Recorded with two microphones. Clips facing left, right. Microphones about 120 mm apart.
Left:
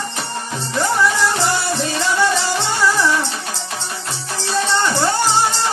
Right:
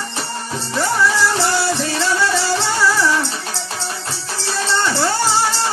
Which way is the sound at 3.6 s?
35° right (ahead or behind).